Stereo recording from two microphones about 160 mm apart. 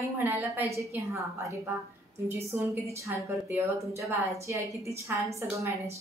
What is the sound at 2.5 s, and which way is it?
Speech, 15° right (ahead or behind).